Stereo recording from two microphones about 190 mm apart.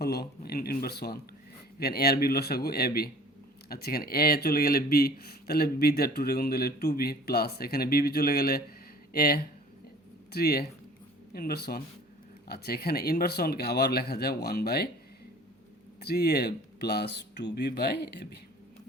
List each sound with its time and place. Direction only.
0.0 s speech: 55° left (ahead or behind)
16.0 s speech: 55° left (ahead or behind)